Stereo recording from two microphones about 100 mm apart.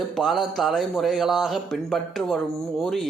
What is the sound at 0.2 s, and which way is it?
A man's voice, centre (ahead or behind).